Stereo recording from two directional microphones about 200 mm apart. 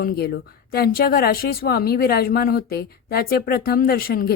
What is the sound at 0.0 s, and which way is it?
Speech, 50° left (ahead or behind).